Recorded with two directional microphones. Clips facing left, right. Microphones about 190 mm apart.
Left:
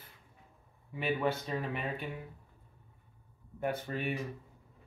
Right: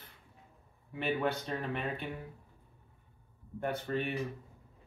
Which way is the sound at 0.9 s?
5° left (ahead or behind).